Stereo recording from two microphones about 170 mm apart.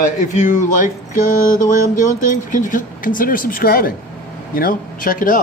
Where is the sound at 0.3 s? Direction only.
45° left (ahead or behind).